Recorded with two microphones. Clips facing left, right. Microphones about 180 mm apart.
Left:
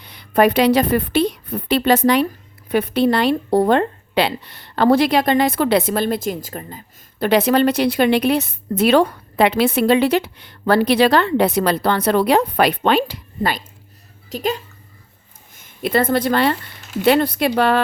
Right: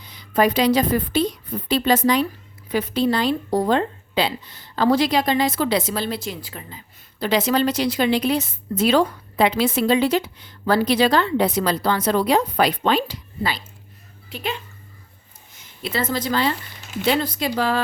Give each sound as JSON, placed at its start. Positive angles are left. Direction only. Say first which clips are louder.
{"t": 0.0, "sound": "a woman's voice", "louder": "left 4 dB", "side_deg": 60}
{"t": 14.3, "sound": "speech", "louder": "left 6 dB", "side_deg": 40}
{"t": 15.5, "sound": "a woman's voice", "louder": "left 8 dB", "side_deg": 50}